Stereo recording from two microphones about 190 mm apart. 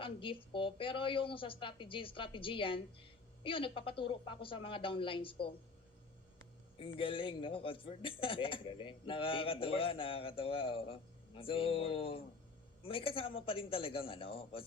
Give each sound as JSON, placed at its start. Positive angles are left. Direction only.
{"t": 0.0, "sound": "a woman's voice", "side_deg": 30}
{"t": 6.7, "sound": "a woman's voice", "side_deg": 30}